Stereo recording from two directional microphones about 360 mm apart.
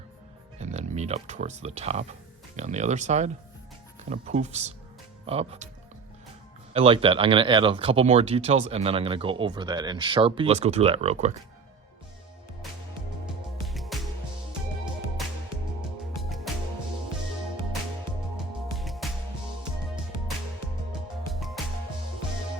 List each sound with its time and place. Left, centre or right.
0.6 s speech: centre
6.7 s speech: centre
13.7 s music: centre
16.2 s music: centre
18.8 s music: centre
21.3 s music: centre